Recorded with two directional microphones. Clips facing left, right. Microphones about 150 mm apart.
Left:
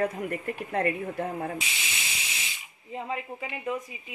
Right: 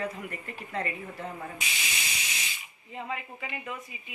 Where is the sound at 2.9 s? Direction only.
35° left (ahead or behind).